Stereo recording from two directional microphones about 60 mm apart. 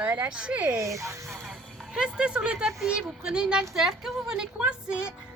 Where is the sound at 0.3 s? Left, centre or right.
Centre.